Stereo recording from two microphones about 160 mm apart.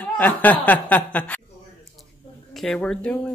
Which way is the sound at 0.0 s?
10° left (ahead or behind).